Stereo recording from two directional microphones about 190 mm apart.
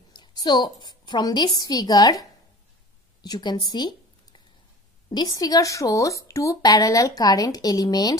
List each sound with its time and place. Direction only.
0.1 s a woman's voice: 20° left (ahead or behind)
3.2 s a sound: 20° left (ahead or behind)
5.1 s a woman's voice: 20° left (ahead or behind)